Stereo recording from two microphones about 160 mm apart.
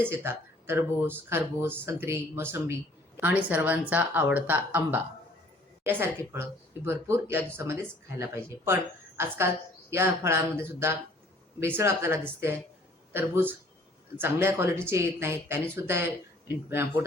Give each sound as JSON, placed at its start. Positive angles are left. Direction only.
{"t": 0.0, "sound": "speech", "side_deg": -15}